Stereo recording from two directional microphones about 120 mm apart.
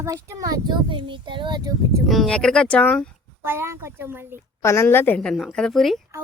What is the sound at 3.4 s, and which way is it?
Speech, 20° right (ahead or behind).